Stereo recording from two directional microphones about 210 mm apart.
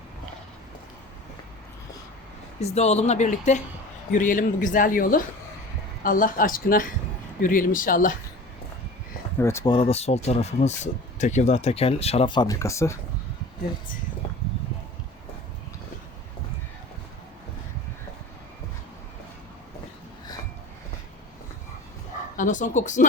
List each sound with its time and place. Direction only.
2.6 s speech: 30° left (ahead or behind)
9.4 s speech: 15° left (ahead or behind)
9.7 s speech: 30° left (ahead or behind)
22.4 s speech: 35° left (ahead or behind)